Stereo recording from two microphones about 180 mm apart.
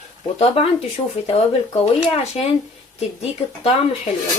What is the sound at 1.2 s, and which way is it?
Speech, 35° left (ahead or behind).